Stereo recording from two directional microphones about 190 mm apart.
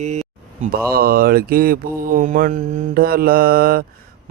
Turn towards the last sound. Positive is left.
turn(degrees=-50)  # may be behind; listen again after turning